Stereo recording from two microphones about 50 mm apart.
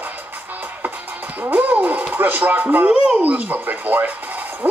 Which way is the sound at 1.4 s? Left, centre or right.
Right.